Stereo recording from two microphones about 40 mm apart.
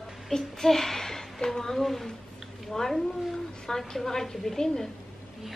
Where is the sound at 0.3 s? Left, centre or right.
Centre.